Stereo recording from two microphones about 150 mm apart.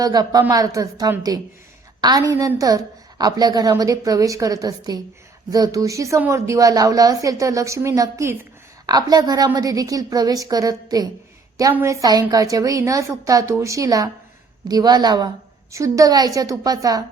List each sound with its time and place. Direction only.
0.0 s a woman's voice: 25° right (ahead or behind)